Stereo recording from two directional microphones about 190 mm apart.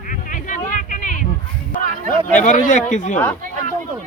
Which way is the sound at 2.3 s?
40° left (ahead or behind).